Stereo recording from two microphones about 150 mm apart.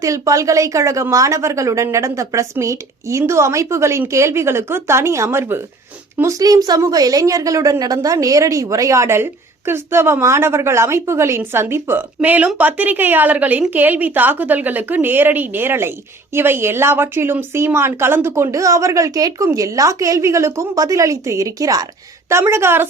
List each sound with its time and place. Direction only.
0.0 s a woman's voice: 20° right (ahead or behind)